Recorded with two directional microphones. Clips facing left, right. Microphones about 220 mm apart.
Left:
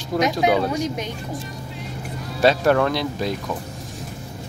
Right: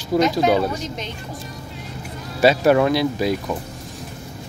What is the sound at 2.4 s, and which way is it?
Speech, 10° right (ahead or behind).